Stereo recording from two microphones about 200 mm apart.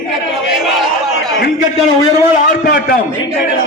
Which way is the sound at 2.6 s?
50° left (ahead or behind).